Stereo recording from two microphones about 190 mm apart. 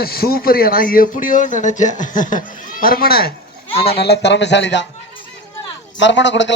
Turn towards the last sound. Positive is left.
turn(degrees=70)  # may be behind; listen again after turning